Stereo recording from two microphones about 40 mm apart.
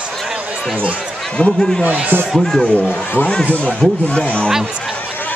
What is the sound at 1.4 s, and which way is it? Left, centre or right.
Speech, left.